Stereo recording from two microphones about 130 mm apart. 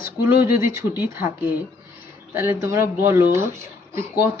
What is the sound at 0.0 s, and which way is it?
Speech, 15° right (ahead or behind).